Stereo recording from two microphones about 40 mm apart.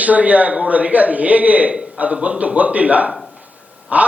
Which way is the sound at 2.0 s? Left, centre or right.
Right.